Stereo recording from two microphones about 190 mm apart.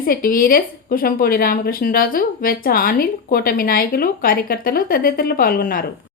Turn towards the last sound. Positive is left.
turn(degrees=50)  # may be behind; listen again after turning